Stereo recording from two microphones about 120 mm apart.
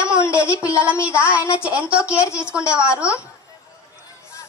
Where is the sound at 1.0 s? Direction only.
10° right (ahead or behind).